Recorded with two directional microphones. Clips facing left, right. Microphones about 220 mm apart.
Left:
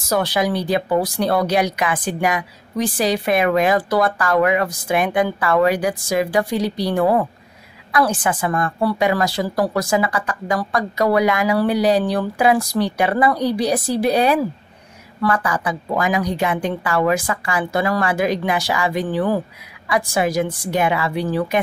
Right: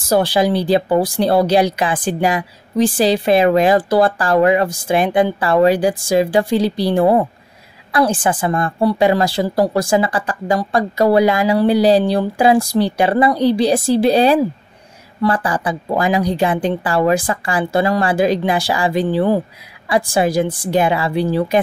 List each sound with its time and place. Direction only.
0.1 s a woman's voice: 30° right (ahead or behind)